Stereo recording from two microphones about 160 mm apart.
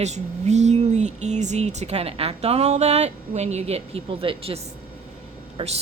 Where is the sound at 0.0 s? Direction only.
45° right (ahead or behind).